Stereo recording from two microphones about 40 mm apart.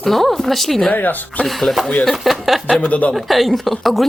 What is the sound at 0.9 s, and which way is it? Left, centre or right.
Speech, left.